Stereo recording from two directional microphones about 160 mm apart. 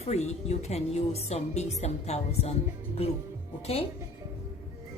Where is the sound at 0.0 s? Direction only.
45° left (ahead or behind).